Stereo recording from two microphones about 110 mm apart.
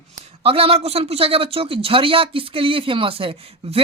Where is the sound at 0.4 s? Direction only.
60° right (ahead or behind).